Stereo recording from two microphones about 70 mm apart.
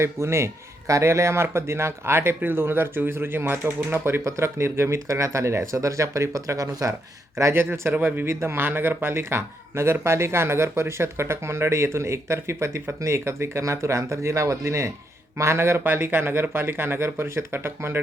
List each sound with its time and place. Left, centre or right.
0.0 s speech: right
7.3 s speech: right